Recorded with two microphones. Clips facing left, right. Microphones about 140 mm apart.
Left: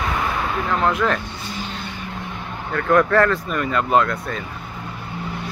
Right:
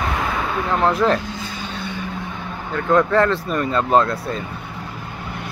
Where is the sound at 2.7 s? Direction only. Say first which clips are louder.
Even; 20° right (ahead or behind).